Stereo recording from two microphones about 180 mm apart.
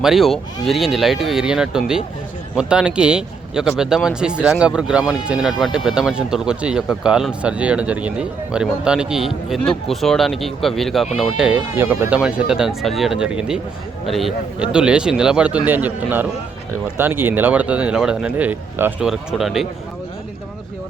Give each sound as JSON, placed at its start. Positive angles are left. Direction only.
{"t": 0.0, "sound": "speech", "side_deg": 0}